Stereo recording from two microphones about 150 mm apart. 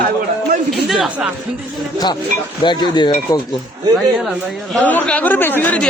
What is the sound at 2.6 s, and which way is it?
Speech, 30° left (ahead or behind).